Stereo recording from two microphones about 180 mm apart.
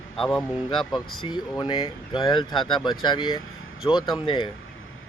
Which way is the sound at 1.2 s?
25° left (ahead or behind).